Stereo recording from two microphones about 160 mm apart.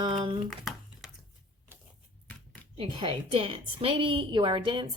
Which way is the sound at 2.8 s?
35° right (ahead or behind).